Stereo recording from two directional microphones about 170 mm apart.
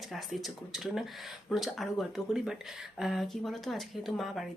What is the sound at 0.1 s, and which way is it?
Speech, centre (ahead or behind).